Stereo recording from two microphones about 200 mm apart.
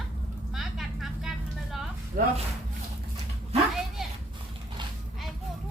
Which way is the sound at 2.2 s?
45° right (ahead or behind).